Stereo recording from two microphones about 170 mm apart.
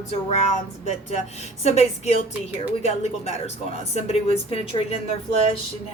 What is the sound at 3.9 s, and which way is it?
A woman's voice, 35° left (ahead or behind).